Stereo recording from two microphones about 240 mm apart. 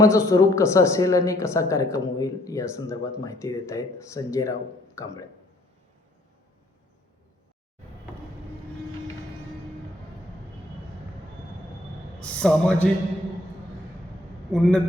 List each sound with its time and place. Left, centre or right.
0.0 s a woman's voice: centre
12.2 s a man's voice: centre
14.5 s a man's voice: centre